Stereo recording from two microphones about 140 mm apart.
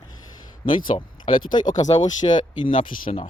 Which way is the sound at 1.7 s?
55° left (ahead or behind).